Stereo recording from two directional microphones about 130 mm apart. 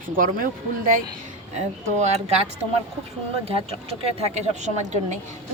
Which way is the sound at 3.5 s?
50° right (ahead or behind).